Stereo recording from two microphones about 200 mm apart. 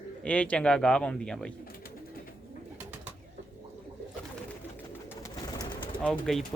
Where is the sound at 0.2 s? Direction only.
5° left (ahead or behind).